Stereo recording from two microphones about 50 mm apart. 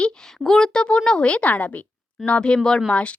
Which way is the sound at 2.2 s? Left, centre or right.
Left.